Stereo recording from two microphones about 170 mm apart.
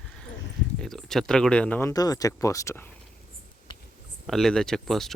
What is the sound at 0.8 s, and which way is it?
Speech, 5° left (ahead or behind).